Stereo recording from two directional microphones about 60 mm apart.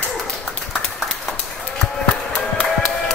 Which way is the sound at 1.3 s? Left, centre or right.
Centre.